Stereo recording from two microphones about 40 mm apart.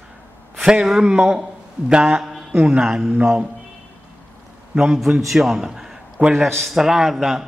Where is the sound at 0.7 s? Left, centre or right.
Centre.